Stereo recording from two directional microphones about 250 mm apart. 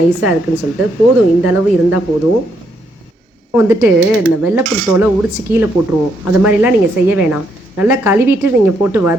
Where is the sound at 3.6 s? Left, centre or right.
Centre.